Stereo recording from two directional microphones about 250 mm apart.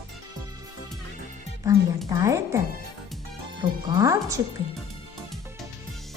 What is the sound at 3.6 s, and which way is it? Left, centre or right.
Speech, centre.